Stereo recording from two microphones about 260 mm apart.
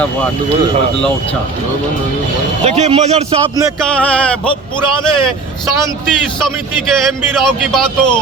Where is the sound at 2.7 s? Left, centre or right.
Right.